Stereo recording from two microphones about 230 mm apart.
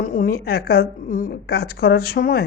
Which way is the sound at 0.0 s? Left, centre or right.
Left.